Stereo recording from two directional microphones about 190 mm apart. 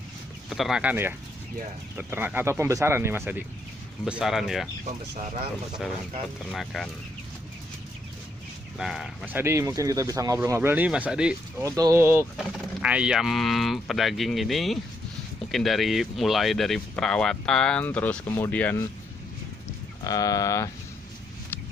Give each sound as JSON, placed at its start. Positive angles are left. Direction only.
{"t": 0.5, "sound": "speech", "side_deg": 0}
{"t": 6.5, "sound": "speech", "side_deg": 0}
{"t": 8.8, "sound": "speech", "side_deg": 0}
{"t": 20.1, "sound": "speech", "side_deg": 20}